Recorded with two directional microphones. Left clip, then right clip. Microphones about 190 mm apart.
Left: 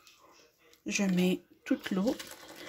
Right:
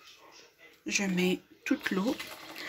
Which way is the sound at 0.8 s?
35° left (ahead or behind).